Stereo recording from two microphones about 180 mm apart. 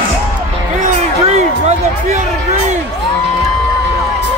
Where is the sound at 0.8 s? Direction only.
40° right (ahead or behind).